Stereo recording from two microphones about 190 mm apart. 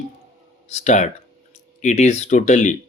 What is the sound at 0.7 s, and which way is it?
Speech, 35° left (ahead or behind).